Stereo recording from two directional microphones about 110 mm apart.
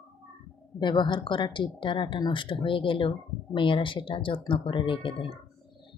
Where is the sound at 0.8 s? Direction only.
45° left (ahead or behind).